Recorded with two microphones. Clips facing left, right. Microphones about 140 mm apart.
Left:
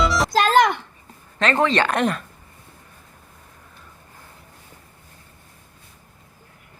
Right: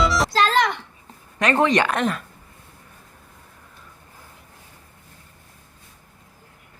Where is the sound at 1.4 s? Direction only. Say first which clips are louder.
Right 1 dB; 15° right (ahead or behind).